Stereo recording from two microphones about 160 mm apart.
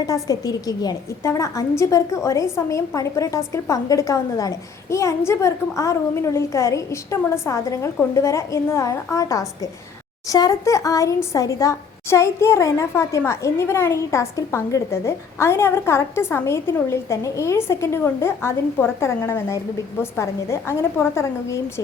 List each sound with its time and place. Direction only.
0.0 s a woman's voice: 20° left (ahead or behind)